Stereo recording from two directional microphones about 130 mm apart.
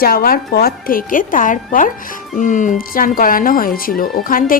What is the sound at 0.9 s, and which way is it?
Speech, 90° left.